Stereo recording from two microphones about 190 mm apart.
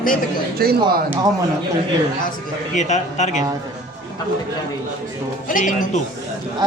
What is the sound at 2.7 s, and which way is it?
Speech, 40° left (ahead or behind).